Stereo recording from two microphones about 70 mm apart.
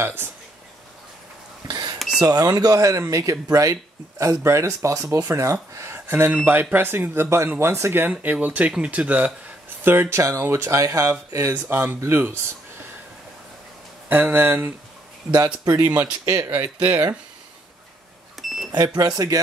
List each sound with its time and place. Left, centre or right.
0.0 s speech: right
1.7 s a sound: right
2.2 s speech: right
3.0 s speech: right
4.2 s speech: right
5.9 s a sound: right
6.4 s speech: right
8.2 s speech: right
9.8 s speech: right
11.6 s speech: right
14.0 s speech: right
15.3 s speech: right
16.4 s speech: right
18.9 s speech: right